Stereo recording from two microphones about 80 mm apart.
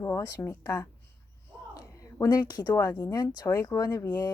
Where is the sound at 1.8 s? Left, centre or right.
Left.